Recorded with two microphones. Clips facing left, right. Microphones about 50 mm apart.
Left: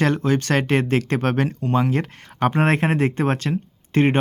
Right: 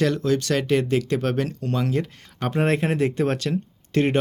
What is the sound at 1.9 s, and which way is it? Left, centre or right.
Speech, left.